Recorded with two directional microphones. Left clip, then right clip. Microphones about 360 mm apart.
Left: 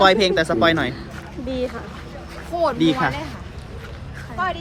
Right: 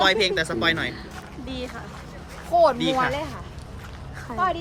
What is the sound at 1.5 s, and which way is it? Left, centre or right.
Speech, centre.